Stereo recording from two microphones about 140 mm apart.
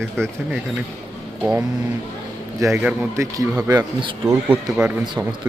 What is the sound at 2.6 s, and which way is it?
Speech, 20° right (ahead or behind).